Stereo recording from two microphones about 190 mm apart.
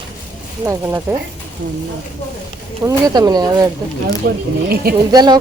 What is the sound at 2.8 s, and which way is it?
Speech, 20° right (ahead or behind).